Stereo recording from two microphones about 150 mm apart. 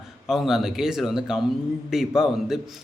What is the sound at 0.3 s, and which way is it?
A man's voice, centre (ahead or behind).